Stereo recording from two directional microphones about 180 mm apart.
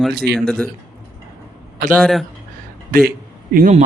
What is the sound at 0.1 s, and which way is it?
Speech, 60° right (ahead or behind).